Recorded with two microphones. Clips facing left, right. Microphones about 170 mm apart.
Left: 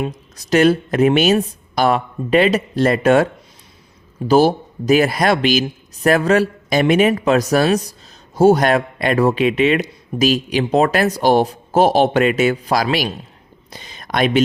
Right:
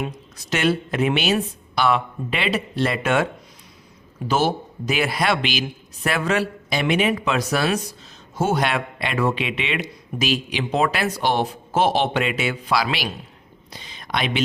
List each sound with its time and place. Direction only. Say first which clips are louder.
0.3 s speech: left 8 dB; 40° left (ahead or behind)
4.3 s a man's voice: left 8 dB; 35° left (ahead or behind)
13.7 s a sound: left 2 dB; 45° left (ahead or behind)